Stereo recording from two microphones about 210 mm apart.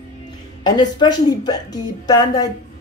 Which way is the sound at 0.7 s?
20° left (ahead or behind).